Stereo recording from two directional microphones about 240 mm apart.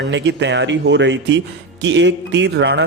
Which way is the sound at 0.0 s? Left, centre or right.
Right.